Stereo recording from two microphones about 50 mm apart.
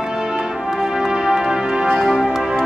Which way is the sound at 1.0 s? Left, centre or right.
Centre.